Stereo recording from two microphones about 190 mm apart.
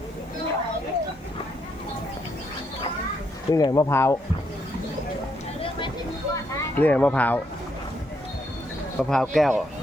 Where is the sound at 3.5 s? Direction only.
20° left (ahead or behind).